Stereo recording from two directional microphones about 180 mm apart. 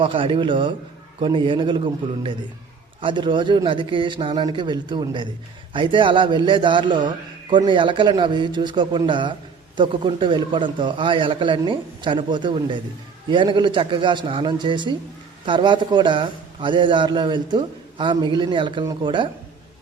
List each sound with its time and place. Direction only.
0.0 s a man's voice: 30° right (ahead or behind)